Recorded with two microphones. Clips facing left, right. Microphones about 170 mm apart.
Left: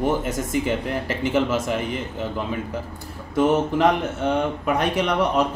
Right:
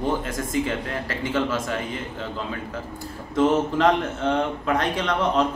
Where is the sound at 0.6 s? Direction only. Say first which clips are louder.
Left 3 dB; 20° left (ahead or behind).